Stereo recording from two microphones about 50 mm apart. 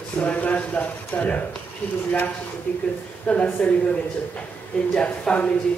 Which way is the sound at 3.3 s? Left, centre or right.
Left.